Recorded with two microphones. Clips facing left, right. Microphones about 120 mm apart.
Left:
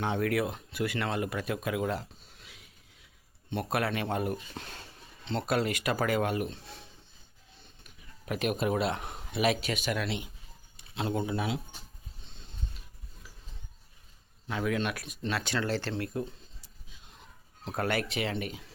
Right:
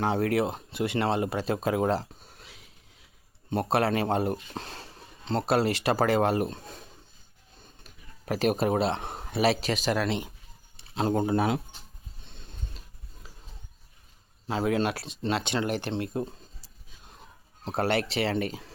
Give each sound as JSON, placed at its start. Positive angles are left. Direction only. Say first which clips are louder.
{"t": 0.0, "sound": "speech", "louder": "right 4 dB", "side_deg": -35}
{"t": 7.6, "sound": "a sound", "louder": "right 4 dB", "side_deg": -40}
{"t": 9.3, "sound": "speech", "louder": "right 3 dB", "side_deg": -35}
{"t": 14.4, "sound": "speech", "louder": "right 5 dB", "side_deg": -30}
{"t": 16.2, "sound": "a sound", "louder": "right 4 dB", "side_deg": -40}
{"t": 17.7, "sound": "speech", "louder": "right 4 dB", "side_deg": -30}